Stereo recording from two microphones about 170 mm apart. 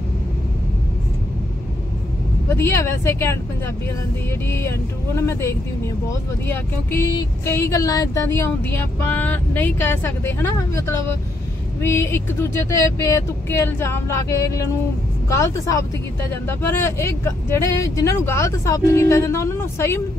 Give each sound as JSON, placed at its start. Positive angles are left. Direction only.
{"t": 2.5, "sound": "speech", "side_deg": 15}
{"t": 4.5, "sound": "speech", "side_deg": 15}